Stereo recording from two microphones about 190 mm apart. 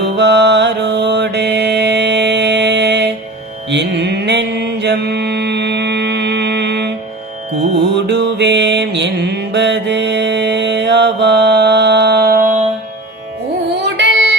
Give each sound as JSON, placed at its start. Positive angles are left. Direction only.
{"t": 0.2, "sound": "mantra", "side_deg": -65}
{"t": 7.9, "sound": "mantra", "side_deg": -65}
{"t": 13.9, "sound": "child singing", "side_deg": -70}